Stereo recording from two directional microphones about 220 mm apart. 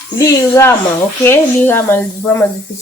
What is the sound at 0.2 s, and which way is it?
Speech, 15° left (ahead or behind).